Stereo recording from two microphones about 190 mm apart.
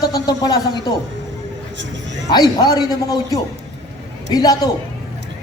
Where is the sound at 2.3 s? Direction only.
20° left (ahead or behind).